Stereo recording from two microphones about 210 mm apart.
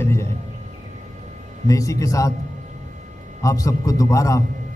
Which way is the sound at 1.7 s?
15° left (ahead or behind).